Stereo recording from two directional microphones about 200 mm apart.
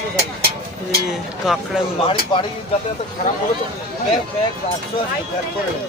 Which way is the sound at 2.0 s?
25° left (ahead or behind).